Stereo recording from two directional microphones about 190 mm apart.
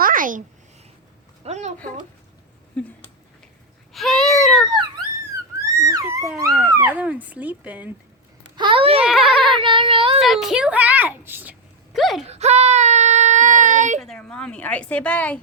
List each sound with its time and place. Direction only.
0.0 s a sound: 45° right (ahead or behind)
1.5 s a sound: 35° right (ahead or behind)
3.9 s baby cry: centre (ahead or behind)
5.6 s a sound: 20° right (ahead or behind)
6.7 s a child's voice: 10° right (ahead or behind)
8.5 s a sound: 25° right (ahead or behind)
9.0 s baby cry: centre (ahead or behind)
9.6 s child singing: 25° right (ahead or behind)
10.2 s a child's voice: centre (ahead or behind)
11.9 s speech: centre (ahead or behind)
12.2 s child singing: 35° right (ahead or behind)
14.0 s a woman's voice: 5° left (ahead or behind)